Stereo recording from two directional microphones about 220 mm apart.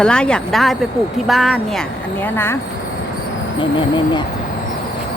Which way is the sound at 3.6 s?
20° left (ahead or behind).